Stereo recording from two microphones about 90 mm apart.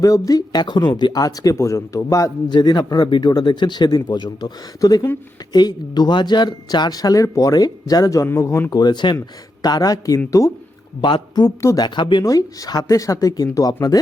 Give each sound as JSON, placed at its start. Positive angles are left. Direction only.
{"t": 0.0, "sound": "a man's voice", "side_deg": 40}
{"t": 0.6, "sound": "a man's voice", "side_deg": 55}
{"t": 2.5, "sound": "a man's voice", "side_deg": 50}
{"t": 8.7, "sound": "speech", "side_deg": 55}
{"t": 11.0, "sound": "speech", "side_deg": 55}
{"t": 12.2, "sound": "a man's voice", "side_deg": 40}